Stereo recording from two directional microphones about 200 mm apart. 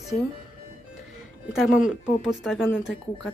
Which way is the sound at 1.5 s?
Centre (ahead or behind).